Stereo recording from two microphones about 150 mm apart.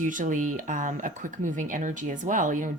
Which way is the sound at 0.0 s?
60° right (ahead or behind).